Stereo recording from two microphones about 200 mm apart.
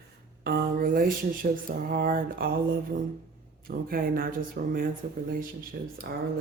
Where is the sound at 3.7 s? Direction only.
50° right (ahead or behind).